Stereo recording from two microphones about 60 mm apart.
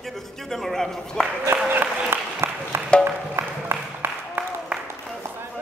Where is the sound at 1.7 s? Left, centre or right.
Right.